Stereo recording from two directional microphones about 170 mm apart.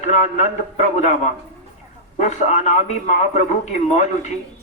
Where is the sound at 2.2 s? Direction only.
45° left (ahead or behind).